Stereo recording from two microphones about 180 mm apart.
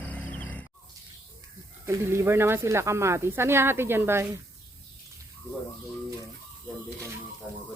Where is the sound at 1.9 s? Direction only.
15° right (ahead or behind).